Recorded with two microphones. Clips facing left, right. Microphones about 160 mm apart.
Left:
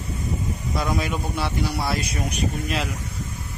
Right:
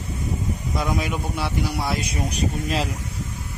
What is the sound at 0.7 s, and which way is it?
Speech, 10° right (ahead or behind).